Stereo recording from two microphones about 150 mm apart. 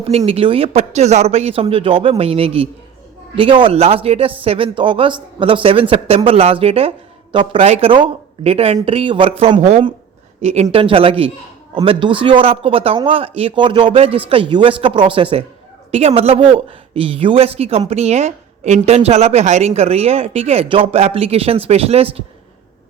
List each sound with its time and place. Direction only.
0.3 s speech: 40° right (ahead or behind)